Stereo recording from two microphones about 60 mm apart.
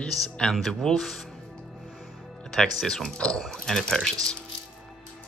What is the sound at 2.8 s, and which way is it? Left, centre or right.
Speech, centre.